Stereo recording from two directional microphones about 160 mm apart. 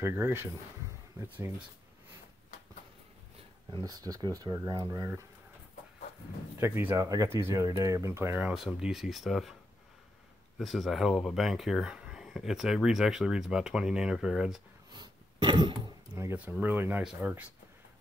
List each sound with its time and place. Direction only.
0.0 s speech: 15° right (ahead or behind)
3.7 s speech: 25° right (ahead or behind)
6.6 s speech: 10° right (ahead or behind)
10.6 s speech: centre (ahead or behind)
14.9 s throat clearing: 25° right (ahead or behind)
16.3 s speech: 10° right (ahead or behind)